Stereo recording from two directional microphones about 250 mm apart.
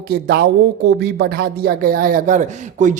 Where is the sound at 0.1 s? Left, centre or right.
Right.